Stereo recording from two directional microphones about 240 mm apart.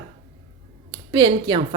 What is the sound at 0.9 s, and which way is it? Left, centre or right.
Speech, centre.